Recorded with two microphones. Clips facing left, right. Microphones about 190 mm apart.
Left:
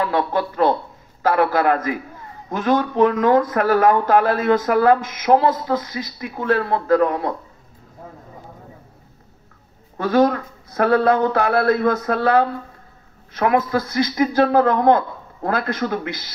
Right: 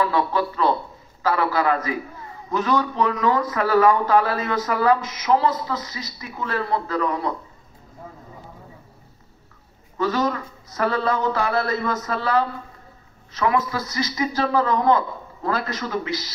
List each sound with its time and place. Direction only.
0.0 s a man's voice: 50° left (ahead or behind)
9.9 s a man's voice: 55° left (ahead or behind)